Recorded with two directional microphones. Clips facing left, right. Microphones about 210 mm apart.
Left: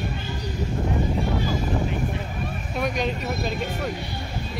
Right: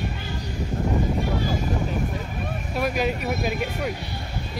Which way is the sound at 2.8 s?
5° right (ahead or behind).